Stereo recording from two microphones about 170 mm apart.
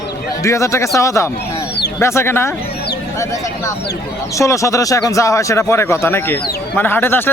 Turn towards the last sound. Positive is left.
turn(degrees=10)  # may be behind; listen again after turning